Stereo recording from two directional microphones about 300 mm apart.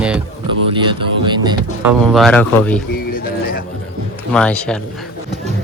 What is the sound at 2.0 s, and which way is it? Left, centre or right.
Speech, centre.